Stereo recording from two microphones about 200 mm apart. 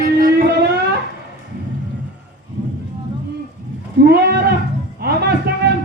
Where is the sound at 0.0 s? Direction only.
45° right (ahead or behind).